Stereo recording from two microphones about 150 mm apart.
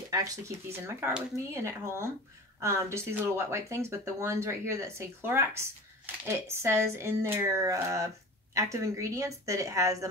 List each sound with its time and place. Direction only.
0.1 s speech: 20° right (ahead or behind)